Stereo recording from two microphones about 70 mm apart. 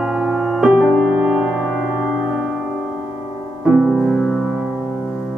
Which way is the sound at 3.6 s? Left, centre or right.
Centre.